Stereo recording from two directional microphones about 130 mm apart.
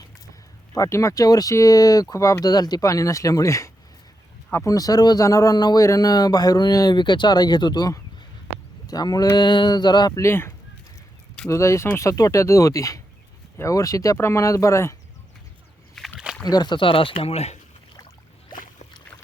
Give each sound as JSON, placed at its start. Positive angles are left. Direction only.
{"t": 0.7, "sound": "a man's voice", "side_deg": 25}
{"t": 16.0, "sound": "a sound", "side_deg": -5}
{"t": 16.4, "sound": "speech", "side_deg": 30}